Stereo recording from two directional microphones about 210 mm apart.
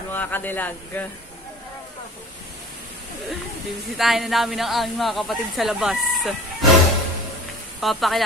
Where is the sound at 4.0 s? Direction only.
Centre (ahead or behind).